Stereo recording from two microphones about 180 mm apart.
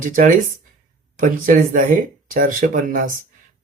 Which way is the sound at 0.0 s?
50° right (ahead or behind).